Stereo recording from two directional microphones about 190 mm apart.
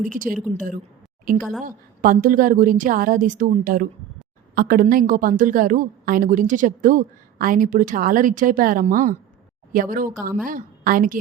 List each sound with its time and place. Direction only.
0.0 s a woman's voice: 45° right (ahead or behind)
1.4 s a woman's voice: centre (ahead or behind)
1.6 s a woman's voice: 45° right (ahead or behind)